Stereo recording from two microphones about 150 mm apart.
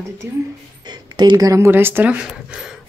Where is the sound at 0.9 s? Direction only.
30° right (ahead or behind); by 2.7 s 5° right (ahead or behind).